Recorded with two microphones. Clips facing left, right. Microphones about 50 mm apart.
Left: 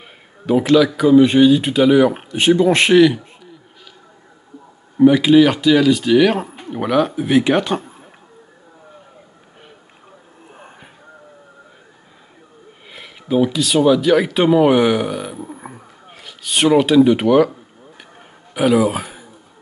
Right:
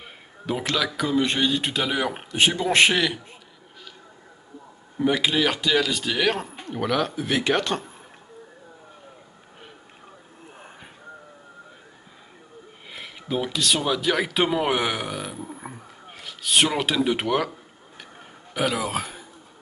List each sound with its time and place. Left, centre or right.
0.5 s speech: centre
5.0 s speech: centre
10.5 s a sound: centre
12.9 s speech: centre
18.5 s speech: centre